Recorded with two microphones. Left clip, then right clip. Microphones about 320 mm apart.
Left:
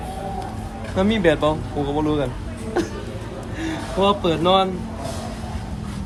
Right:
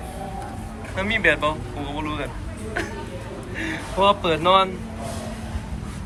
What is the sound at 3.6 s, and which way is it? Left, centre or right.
Speech, centre.